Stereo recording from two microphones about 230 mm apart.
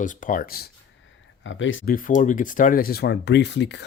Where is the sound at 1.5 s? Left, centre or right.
Left.